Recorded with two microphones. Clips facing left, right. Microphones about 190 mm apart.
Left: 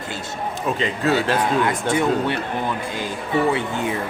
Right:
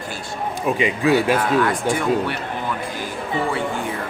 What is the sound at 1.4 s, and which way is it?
Speech, 20° left (ahead or behind).